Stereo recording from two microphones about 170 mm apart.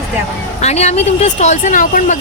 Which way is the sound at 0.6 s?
40° left (ahead or behind).